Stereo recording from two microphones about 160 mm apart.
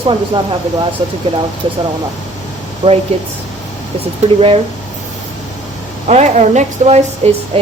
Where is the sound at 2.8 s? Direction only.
40° right (ahead or behind).